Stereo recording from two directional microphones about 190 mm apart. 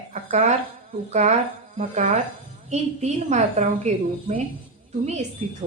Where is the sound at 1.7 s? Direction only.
40° right (ahead or behind).